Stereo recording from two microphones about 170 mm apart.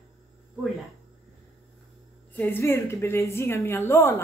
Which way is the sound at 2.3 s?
10° left (ahead or behind).